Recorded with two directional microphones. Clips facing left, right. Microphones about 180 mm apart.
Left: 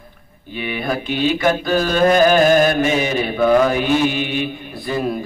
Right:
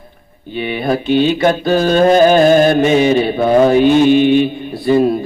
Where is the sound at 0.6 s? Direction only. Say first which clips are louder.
Right 6 dB; 30° right (ahead or behind).